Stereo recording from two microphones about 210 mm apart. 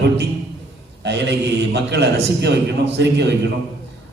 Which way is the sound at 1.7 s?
55° right (ahead or behind).